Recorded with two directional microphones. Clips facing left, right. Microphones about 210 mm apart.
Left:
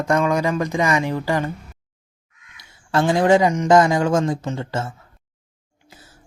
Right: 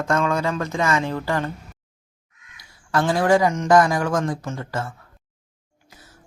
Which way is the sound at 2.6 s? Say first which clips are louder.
Left 2 dB; 20° left (ahead or behind).